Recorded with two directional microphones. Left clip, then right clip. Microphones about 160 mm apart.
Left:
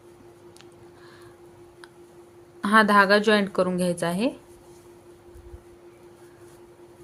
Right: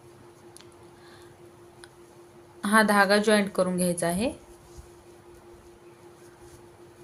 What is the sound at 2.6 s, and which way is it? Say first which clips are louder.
Speech: left 3 dB; 25° left (ahead or behind).